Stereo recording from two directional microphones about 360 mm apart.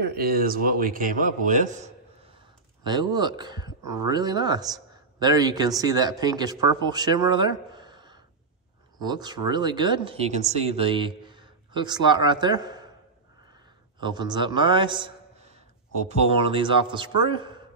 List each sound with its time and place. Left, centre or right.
0.1 s a man's voice: right
13.9 s a man's voice: centre